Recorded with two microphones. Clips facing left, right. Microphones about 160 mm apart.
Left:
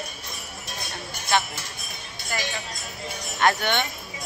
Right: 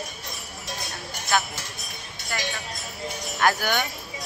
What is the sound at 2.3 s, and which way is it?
Speech, 5° left (ahead or behind).